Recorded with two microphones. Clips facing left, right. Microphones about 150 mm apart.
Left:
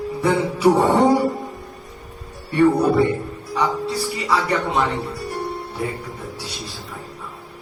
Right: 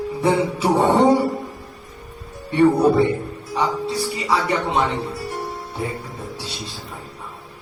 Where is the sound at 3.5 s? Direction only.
25° right (ahead or behind).